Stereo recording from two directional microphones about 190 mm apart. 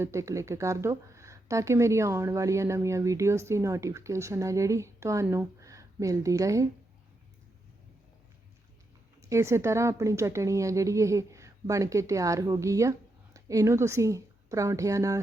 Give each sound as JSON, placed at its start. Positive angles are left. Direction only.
{"t": 0.0, "sound": "speech", "side_deg": -15}
{"t": 9.2, "sound": "speech", "side_deg": -15}